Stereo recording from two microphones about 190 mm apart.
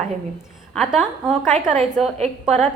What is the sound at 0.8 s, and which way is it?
Speech, centre (ahead or behind).